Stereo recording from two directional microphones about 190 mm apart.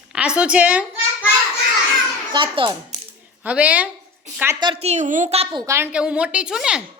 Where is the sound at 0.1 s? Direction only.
5° right (ahead or behind).